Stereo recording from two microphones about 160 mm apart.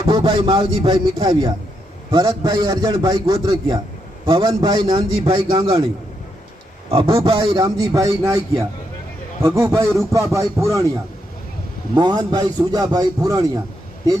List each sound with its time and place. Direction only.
0.1 s a man's voice: 30° right (ahead or behind)
6.9 s a man's voice: 35° right (ahead or behind)
11.9 s a man's voice: 25° right (ahead or behind)